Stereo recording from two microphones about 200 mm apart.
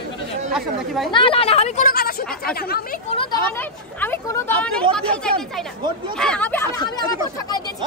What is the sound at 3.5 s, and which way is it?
A woman's voice, 10° left (ahead or behind).